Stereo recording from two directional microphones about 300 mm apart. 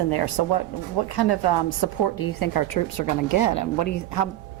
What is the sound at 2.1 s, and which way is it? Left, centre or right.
A woman's voice, left.